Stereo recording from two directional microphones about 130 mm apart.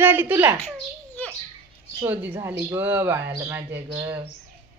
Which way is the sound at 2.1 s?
15° right (ahead or behind).